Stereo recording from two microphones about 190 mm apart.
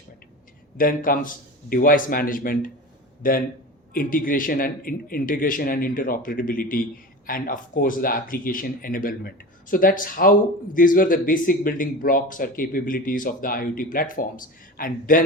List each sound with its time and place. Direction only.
0.8 s speech: 45° left (ahead or behind)